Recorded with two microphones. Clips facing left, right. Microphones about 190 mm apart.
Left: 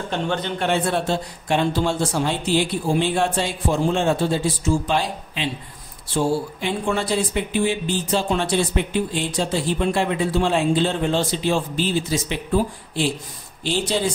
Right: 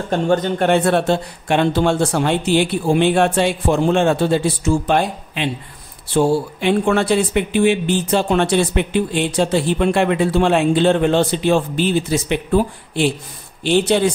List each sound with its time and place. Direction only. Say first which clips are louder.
0.1 s speech: right 8 dB; 45° right (ahead or behind); by 14.1 s 65° right (ahead or behind)